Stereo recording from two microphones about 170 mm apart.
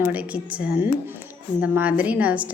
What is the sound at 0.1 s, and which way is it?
A woman's voice, 5° right (ahead or behind).